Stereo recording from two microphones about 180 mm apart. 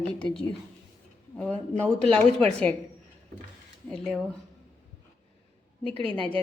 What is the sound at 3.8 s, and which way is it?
Speech, 5° left (ahead or behind).